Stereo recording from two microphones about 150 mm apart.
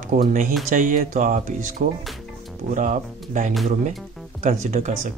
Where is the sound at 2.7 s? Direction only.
60° right (ahead or behind).